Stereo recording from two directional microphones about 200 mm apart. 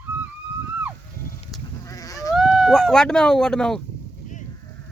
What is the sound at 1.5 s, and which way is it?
Goat, centre (ahead or behind).